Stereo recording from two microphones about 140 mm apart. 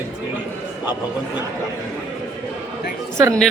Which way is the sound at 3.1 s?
20° right (ahead or behind).